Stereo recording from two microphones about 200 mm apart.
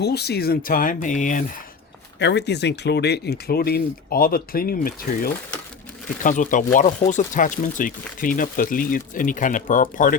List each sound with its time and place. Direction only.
0.0 s speech: 55° left (ahead or behind)
2.1 s speech: 60° left (ahead or behind); by 10.2 s 40° left (ahead or behind)